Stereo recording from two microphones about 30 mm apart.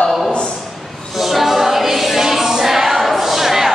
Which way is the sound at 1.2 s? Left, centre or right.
Centre.